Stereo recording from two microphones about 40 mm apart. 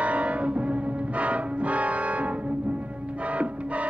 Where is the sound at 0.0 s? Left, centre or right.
Right.